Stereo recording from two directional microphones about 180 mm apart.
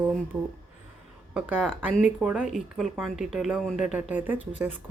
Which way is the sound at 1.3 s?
Centre (ahead or behind).